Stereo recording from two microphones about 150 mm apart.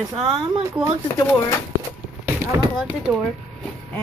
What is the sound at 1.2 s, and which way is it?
Speech, 20° left (ahead or behind).